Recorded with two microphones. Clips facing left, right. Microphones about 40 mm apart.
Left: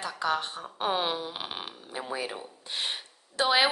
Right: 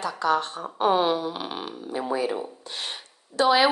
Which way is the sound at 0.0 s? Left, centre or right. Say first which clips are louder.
Right 5 dB; centre.